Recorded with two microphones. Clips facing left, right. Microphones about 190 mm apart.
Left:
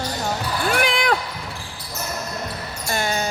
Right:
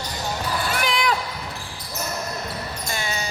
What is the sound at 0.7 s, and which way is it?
Basketball bounce, 55° left (ahead or behind).